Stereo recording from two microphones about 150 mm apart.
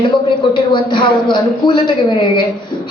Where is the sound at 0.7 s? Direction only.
30° left (ahead or behind).